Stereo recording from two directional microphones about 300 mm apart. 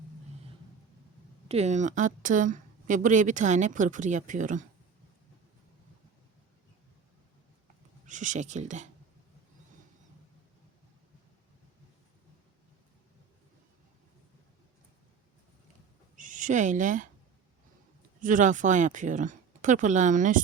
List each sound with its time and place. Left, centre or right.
1.5 s a woman's voice: right
8.0 s a woman's voice: right
16.1 s speech: right
18.2 s a woman's voice: right